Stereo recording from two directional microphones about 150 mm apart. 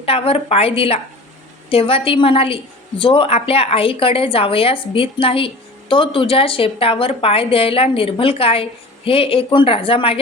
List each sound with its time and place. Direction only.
0.0 s a woman's voice: 40° left (ahead or behind)